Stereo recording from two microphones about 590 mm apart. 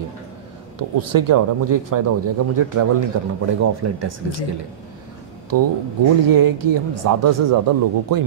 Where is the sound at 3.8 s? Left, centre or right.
Right.